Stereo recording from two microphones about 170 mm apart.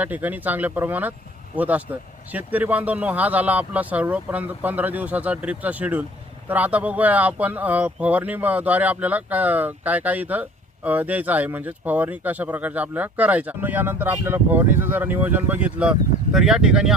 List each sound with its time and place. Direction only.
0.0 s speech: 10° right (ahead or behind)